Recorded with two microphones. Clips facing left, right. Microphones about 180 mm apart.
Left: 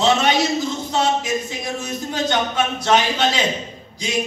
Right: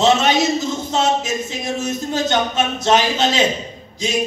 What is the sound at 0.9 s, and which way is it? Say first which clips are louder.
A man's voice: right 1 dB; 25° right (ahead or behind).